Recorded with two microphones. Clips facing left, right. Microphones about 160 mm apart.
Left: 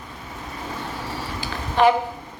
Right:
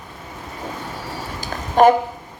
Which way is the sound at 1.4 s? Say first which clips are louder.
Right 4 dB; 45° right (ahead or behind).